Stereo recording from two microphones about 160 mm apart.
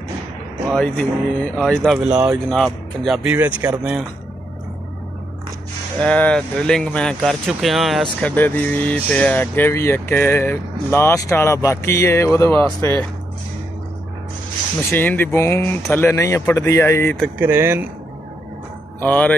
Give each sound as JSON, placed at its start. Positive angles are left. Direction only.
{"t": 0.7, "sound": "speech", "side_deg": 5}
{"t": 2.5, "sound": "speech", "side_deg": 0}
{"t": 3.3, "sound": "speech", "side_deg": -10}
{"t": 5.9, "sound": "speech", "side_deg": 5}
{"t": 14.8, "sound": "speech", "side_deg": 15}
{"t": 17.4, "sound": "speech", "side_deg": -15}
{"t": 18.9, "sound": "speech", "side_deg": 10}